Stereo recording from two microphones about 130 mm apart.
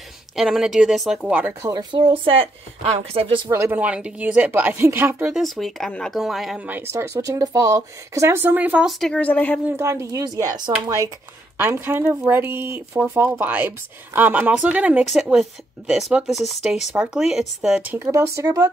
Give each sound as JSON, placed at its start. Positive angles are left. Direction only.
{"t": 0.4, "sound": "speech", "side_deg": -5}
{"t": 1.6, "sound": "speech", "side_deg": -30}
{"t": 2.0, "sound": "speech", "side_deg": -45}
{"t": 3.4, "sound": "speech", "side_deg": -20}
{"t": 3.8, "sound": "speech", "side_deg": -10}
{"t": 5.3, "sound": "speech", "side_deg": 0}
{"t": 6.7, "sound": "speech", "side_deg": -20}
{"t": 9.0, "sound": "a woman's voice", "side_deg": 10}
{"t": 9.7, "sound": "speech", "side_deg": -20}
{"t": 11.5, "sound": "speech", "side_deg": -15}
{"t": 18.0, "sound": "speech", "side_deg": -20}